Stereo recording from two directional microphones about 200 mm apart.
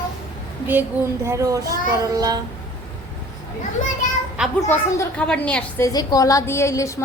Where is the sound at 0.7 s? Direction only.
10° right (ahead or behind).